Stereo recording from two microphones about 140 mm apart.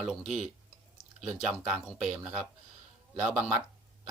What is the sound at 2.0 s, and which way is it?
Speech, 5° right (ahead or behind).